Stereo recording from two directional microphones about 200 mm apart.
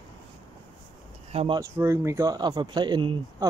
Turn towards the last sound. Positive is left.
turn(degrees=-20)  # may be behind; listen again after turning